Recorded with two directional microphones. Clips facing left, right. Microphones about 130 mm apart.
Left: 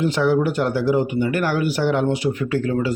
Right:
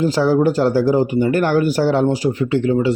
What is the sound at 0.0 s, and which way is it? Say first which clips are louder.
Speech: right 3 dB; 35° right (ahead or behind).